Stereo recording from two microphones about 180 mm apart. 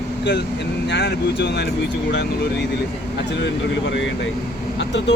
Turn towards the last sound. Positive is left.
turn(degrees=80)